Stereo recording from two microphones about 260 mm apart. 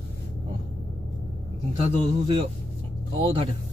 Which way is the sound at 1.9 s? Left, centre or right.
Centre.